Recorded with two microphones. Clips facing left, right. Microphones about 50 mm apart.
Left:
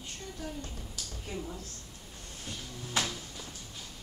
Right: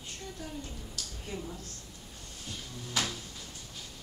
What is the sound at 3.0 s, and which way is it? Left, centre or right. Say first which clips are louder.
Music: left 1 dB; left.